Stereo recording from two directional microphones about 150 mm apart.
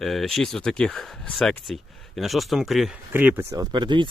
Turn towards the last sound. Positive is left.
turn(degrees=-30)  # may be behind; listen again after turning